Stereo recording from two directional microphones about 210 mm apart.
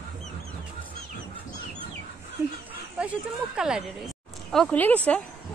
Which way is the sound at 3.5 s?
5° right (ahead or behind).